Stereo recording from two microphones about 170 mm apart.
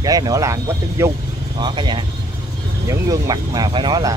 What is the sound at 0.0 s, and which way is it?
Speech, 20° right (ahead or behind).